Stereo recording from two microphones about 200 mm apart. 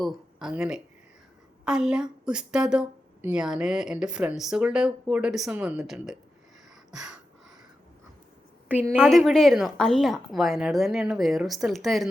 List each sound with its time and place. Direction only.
0.0 s a woman's voice: 5° right (ahead or behind)
9.0 s a woman's voice: centre (ahead or behind)